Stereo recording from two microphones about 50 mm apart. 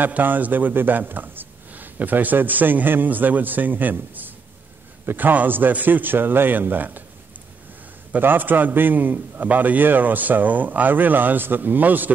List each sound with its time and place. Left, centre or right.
0.0 s a man's voice: right
8.2 s a man's voice: right